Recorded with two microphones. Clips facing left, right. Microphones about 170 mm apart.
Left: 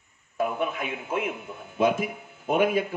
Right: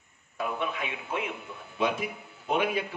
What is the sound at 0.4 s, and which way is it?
A man's voice, 45° left (ahead or behind).